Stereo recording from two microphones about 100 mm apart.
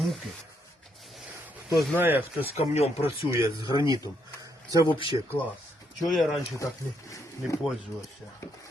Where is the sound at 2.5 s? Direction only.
90° left.